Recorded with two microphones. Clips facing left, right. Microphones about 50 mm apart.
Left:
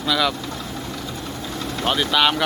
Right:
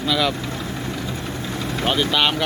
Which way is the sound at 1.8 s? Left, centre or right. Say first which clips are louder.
Left 1 dB; centre.